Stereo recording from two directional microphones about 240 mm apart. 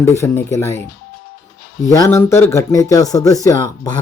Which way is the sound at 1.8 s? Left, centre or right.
Centre.